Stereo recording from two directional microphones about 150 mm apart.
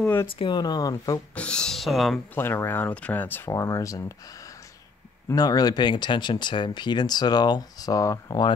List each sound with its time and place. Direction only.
0.0 s speech: 15° left (ahead or behind)
0.4 s speech: 30° left (ahead or behind)
1.3 s speech: 5° left (ahead or behind)
2.3 s speech: 15° left (ahead or behind)
5.3 s speech: 25° left (ahead or behind)